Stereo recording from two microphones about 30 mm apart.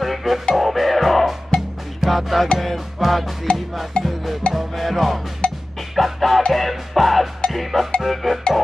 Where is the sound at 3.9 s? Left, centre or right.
Left.